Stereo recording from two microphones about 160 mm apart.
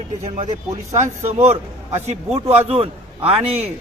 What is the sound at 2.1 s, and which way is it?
Speech, 40° right (ahead or behind).